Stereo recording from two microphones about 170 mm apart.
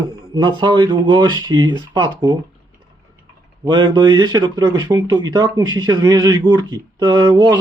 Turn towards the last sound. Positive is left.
turn(degrees=-25)  # may be behind; listen again after turning